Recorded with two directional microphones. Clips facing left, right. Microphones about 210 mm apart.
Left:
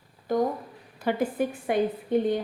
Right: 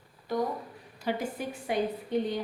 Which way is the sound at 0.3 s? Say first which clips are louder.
Left 5 dB; 50° left (ahead or behind).